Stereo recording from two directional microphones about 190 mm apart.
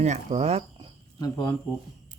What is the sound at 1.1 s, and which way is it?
Speech, 20° left (ahead or behind).